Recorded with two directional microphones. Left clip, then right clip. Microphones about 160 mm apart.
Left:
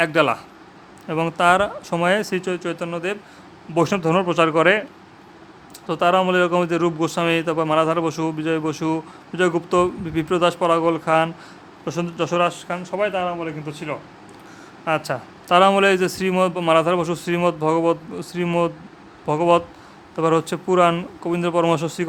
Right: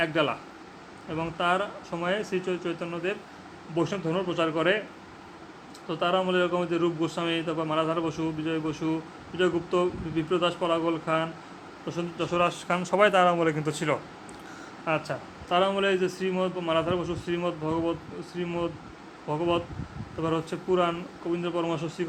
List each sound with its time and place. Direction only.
0.0 s speech: 45° left (ahead or behind)
3.8 s a man's voice: 60° left (ahead or behind)
5.9 s speech: 50° left (ahead or behind)
12.4 s speech: 20° left (ahead or behind)
12.6 s speech: centre (ahead or behind)
12.9 s speech: 20° right (ahead or behind)
14.9 s speech: 25° left (ahead or behind)
15.4 s a man's voice: 60° left (ahead or behind)